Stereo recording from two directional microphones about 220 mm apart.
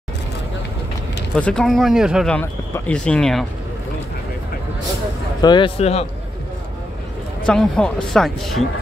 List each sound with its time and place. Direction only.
1.3 s speech: 5° left (ahead or behind)
5.4 s speech: 20° left (ahead or behind)
7.4 s speech: 5° left (ahead or behind)